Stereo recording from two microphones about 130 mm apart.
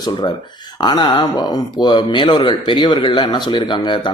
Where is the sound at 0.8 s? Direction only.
40° left (ahead or behind).